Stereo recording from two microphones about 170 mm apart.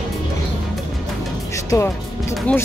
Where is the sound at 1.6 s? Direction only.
15° left (ahead or behind).